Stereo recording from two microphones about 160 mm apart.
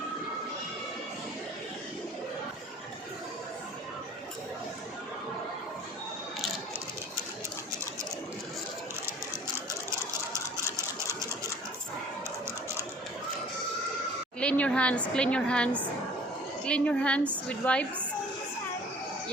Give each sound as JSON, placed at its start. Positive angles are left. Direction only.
{"t": 10.8, "sound": "sewing machine", "side_deg": -20}
{"t": 14.3, "sound": "a woman's voice", "side_deg": 10}